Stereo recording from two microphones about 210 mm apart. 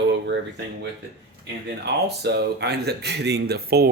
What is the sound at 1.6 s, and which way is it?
Speech, 50° right (ahead or behind).